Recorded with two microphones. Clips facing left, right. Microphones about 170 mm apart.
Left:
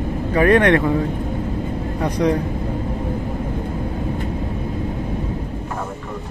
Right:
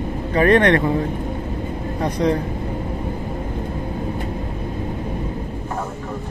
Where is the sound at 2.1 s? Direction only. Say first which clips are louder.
Left 1 dB; 10° left (ahead or behind).